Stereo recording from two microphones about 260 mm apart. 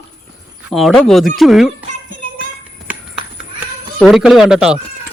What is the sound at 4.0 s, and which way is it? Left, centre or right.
Speech, centre.